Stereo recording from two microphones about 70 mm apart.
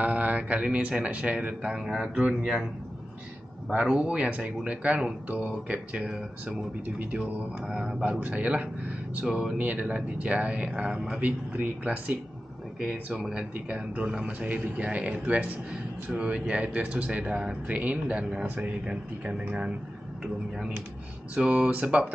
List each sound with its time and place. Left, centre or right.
0.0 s speech: right
3.8 s speech: centre
7.6 s speech: centre
8.0 s speech: centre
9.6 s speech: centre
11.1 s speech: right
21.4 s speech: centre